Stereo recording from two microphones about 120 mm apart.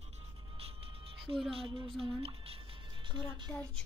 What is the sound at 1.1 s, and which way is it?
Music, 50° right (ahead or behind).